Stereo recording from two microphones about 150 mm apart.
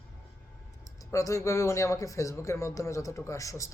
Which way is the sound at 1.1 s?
20° left (ahead or behind).